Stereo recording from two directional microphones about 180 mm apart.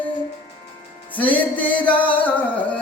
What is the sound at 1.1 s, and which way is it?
Music, 10° left (ahead or behind).